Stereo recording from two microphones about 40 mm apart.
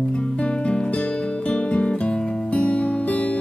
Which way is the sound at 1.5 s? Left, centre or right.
Left.